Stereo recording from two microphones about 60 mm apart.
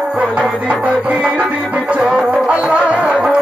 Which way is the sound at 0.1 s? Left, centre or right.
Centre.